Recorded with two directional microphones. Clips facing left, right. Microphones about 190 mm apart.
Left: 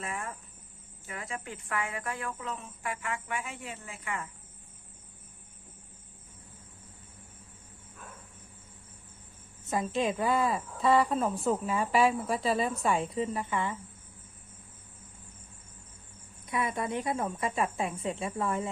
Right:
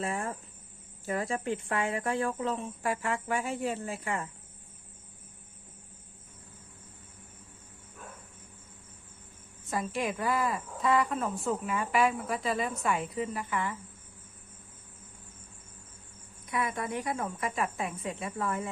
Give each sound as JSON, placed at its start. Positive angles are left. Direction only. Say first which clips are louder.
{"t": 0.0, "sound": "speech", "louder": "right 5 dB", "side_deg": -30}
{"t": 9.6, "sound": "speech", "louder": "left 3 dB", "side_deg": 20}
{"t": 16.5, "sound": "speech", "louder": "left 1 dB", "side_deg": 20}